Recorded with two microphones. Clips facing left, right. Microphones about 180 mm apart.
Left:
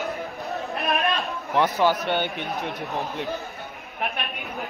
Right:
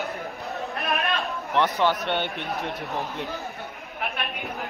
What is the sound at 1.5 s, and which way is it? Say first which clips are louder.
A man's voice: left 2 dB; 5° left (ahead or behind).